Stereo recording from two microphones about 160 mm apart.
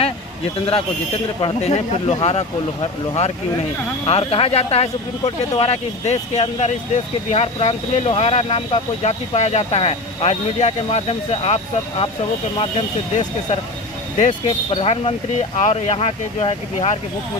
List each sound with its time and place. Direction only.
1.4 s speech: 35° left (ahead or behind)